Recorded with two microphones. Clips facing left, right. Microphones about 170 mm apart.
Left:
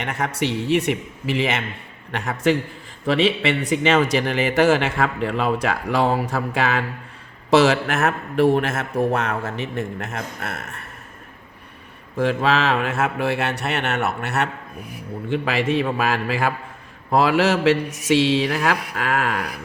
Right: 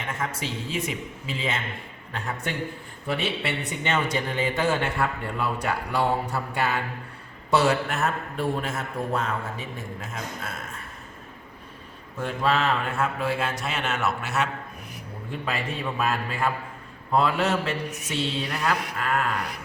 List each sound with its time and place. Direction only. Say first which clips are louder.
0.0 s a man's voice: left 7 dB; 75° left (ahead or behind)
2.1 s mantra: left 11 dB; 90° left
3.1 s a man's voice: left 9 dB; 90° left; by 10.8 s 70° left (ahead or behind)
12.1 s a man's voice: left 5 dB; 80° left; by 14.5 s 65° left (ahead or behind)
15.3 s mantra: left 9 dB; 90° left